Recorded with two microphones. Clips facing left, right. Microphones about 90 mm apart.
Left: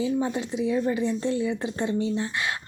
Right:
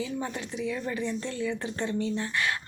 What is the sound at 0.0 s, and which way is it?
Speech, 20° left (ahead or behind).